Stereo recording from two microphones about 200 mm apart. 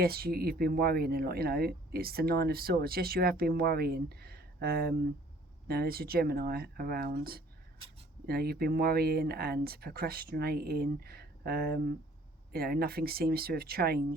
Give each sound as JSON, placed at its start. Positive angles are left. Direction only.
{"t": 0.0, "sound": "speech", "side_deg": -50}